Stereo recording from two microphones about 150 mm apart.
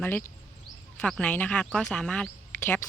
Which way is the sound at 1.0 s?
5° left (ahead or behind).